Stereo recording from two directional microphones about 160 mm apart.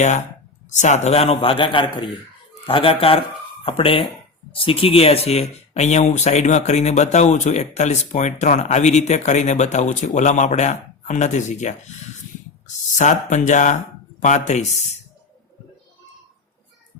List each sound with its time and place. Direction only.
0.0 s a man's voice: 50° left (ahead or behind)